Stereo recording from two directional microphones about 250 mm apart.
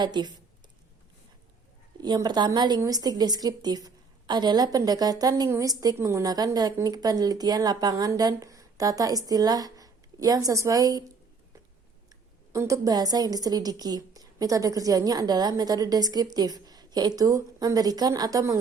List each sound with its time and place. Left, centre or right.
0.0 s a woman's voice: centre
2.0 s a woman's voice: centre
12.5 s a woman's voice: centre